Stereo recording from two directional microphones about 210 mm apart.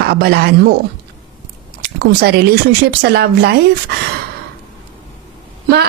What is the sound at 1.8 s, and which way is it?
Speech, 50° right (ahead or behind).